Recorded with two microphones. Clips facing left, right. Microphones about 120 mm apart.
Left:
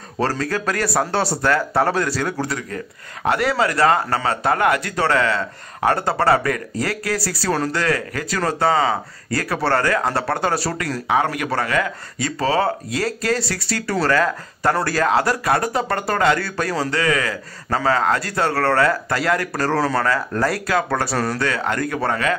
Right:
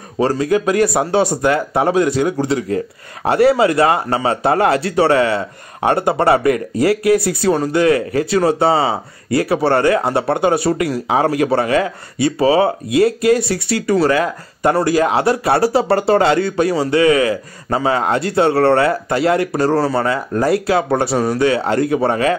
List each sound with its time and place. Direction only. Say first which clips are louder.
0.2 s speech: right 7 dB; 15° right (ahead or behind)
19.7 s speech: right 1 dB; 5° right (ahead or behind)
20.0 s speech: right 3 dB; 20° right (ahead or behind)
21.2 s speech: right 6 dB; 15° right (ahead or behind)
21.5 s speech: right 7 dB; 25° right (ahead or behind)